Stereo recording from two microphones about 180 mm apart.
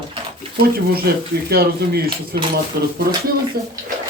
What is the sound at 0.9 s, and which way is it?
Speech, 60° right (ahead or behind).